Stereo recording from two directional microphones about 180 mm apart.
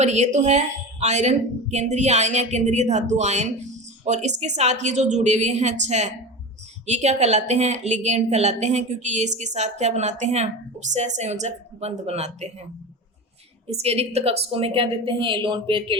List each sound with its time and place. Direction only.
0.0 s speech: 40° right (ahead or behind)
13.7 s speech: 35° right (ahead or behind)